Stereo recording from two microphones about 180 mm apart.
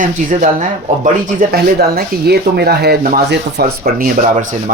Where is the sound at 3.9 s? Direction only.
50° right (ahead or behind).